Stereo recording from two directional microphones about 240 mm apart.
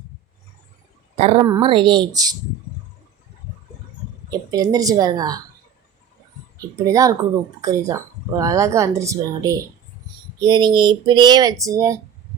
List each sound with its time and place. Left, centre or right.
1.1 s speech: right
4.3 s speech: centre
6.8 s speech: centre